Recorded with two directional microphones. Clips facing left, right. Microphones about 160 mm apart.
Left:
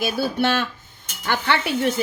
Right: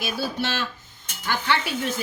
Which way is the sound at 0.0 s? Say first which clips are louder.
Left 6 dB; 55° left (ahead or behind).